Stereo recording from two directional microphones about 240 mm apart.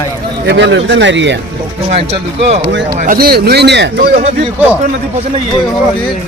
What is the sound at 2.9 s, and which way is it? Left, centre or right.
Speech, right.